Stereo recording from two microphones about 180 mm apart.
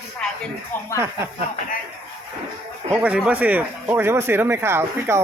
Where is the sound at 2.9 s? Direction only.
10° right (ahead or behind).